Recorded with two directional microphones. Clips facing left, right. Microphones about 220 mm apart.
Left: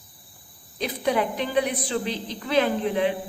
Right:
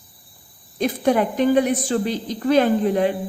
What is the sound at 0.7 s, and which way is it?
A woman's voice, 45° right (ahead or behind).